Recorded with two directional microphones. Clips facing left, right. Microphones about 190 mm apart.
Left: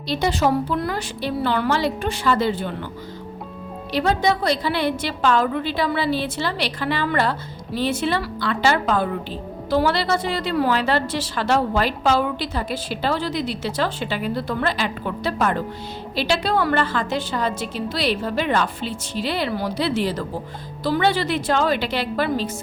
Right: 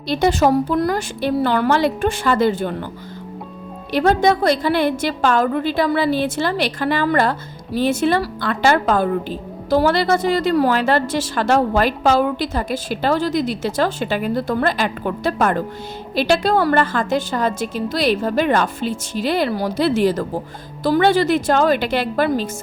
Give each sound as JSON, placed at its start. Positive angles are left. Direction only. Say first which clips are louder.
{"t": 0.1, "sound": "a woman's voice", "louder": "right 4 dB", "side_deg": -50}
{"t": 3.9, "sound": "a woman's voice", "louder": "right 5 dB", "side_deg": -50}